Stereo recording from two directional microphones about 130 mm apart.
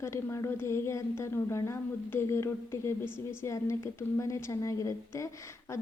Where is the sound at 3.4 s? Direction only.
25° left (ahead or behind).